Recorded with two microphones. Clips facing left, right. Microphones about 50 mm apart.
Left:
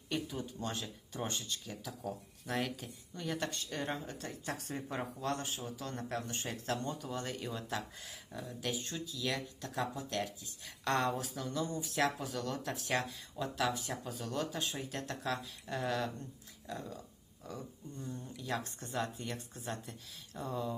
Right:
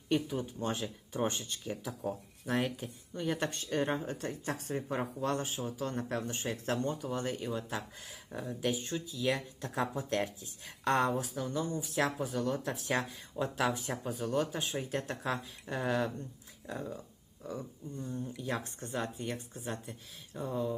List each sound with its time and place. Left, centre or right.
0.3 s speech: right
6.9 s speech: centre
8.3 s speech: right
13.3 s speech: right
17.9 s speech: centre
18.3 s speech: right